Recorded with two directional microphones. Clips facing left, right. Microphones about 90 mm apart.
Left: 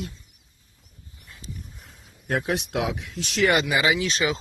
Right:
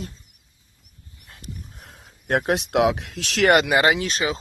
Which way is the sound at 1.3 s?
60° right (ahead or behind).